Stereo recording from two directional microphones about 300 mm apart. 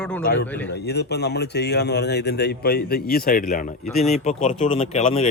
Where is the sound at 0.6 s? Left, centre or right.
Left.